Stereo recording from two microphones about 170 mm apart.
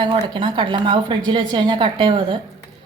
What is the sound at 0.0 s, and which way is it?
A woman's voice, 30° right (ahead or behind).